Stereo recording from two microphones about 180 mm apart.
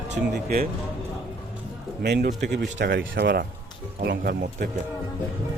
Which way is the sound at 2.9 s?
80° right.